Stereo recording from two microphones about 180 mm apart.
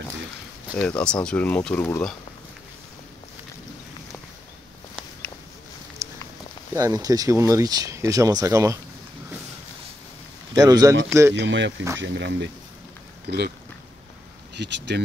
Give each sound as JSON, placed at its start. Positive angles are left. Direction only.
{"t": 0.8, "sound": "speech", "side_deg": 5}
{"t": 6.0, "sound": "a sound", "side_deg": -15}
{"t": 6.7, "sound": "speech", "side_deg": -20}
{"t": 10.5, "sound": "speech", "side_deg": -20}
{"t": 11.3, "sound": "speech", "side_deg": -85}
{"t": 13.3, "sound": "speech", "side_deg": -65}
{"t": 14.5, "sound": "speech", "side_deg": -75}